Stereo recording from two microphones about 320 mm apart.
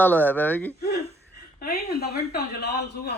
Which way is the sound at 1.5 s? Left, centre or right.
Left.